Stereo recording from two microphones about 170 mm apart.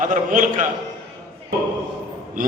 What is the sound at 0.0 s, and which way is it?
Speech, 50° right (ahead or behind).